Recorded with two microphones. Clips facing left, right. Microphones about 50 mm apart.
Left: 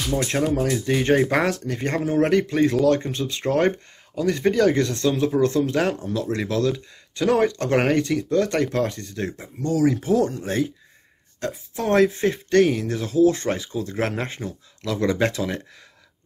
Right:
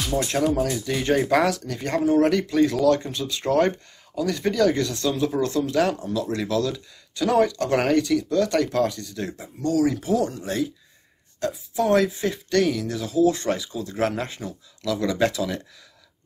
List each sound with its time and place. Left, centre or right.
0.6 s speech: left
2.0 s speech: centre
2.2 s speech: left